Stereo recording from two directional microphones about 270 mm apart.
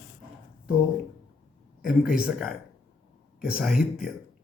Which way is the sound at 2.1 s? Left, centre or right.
Centre.